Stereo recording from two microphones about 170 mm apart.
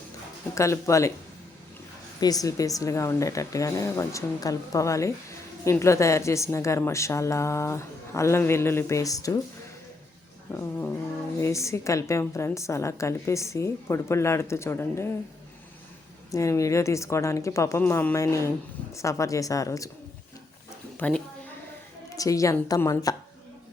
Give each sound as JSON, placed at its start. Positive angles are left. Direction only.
{"t": 0.5, "sound": "a woman's voice", "side_deg": 15}
{"t": 2.2, "sound": "a woman's voice", "side_deg": 20}
{"t": 10.5, "sound": "a woman's voice", "side_deg": 15}
{"t": 16.3, "sound": "a woman's voice", "side_deg": 20}
{"t": 22.1, "sound": "a woman's voice", "side_deg": 20}